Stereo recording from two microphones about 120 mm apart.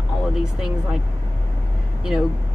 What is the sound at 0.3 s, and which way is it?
Speech, 5° right (ahead or behind).